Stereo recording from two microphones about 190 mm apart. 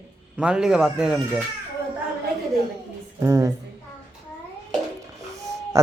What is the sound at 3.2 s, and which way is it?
Speech, 15° right (ahead or behind).